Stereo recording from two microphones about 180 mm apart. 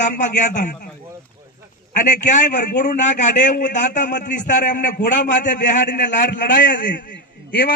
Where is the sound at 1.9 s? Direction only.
45° left (ahead or behind).